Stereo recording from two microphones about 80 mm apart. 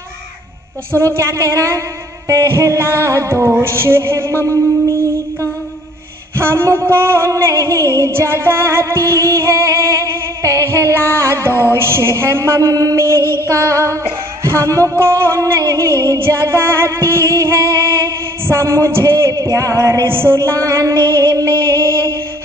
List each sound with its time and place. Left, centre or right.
0.9 s music: right
6.3 s music: right
8.1 s music: right
16.2 s music: right
19.3 s music: right
20.1 s music: right